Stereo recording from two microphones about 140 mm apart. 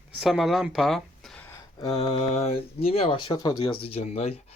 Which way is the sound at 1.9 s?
40° left (ahead or behind).